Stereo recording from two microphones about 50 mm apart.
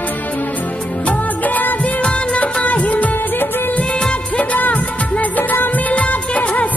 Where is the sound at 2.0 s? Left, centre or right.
Left.